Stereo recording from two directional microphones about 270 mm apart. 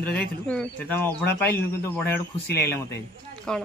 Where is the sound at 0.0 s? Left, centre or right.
Centre.